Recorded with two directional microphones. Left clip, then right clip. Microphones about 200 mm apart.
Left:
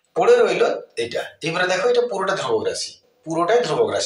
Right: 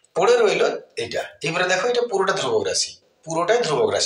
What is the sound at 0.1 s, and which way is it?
Speech, 25° right (ahead or behind).